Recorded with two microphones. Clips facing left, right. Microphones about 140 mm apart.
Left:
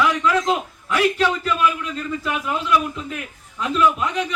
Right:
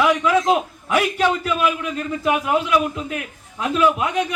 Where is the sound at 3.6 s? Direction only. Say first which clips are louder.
Right 1 dB; 55° right (ahead or behind).